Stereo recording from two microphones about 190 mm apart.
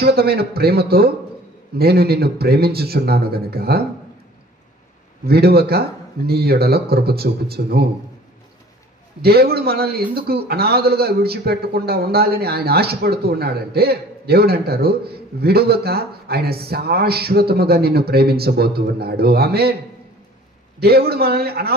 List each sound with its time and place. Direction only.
0.0 s a man's voice: 55° right (ahead or behind)
5.2 s a man's voice: 55° right (ahead or behind)
9.2 s a man's voice: 55° right (ahead or behind)
20.8 s a man's voice: 55° right (ahead or behind)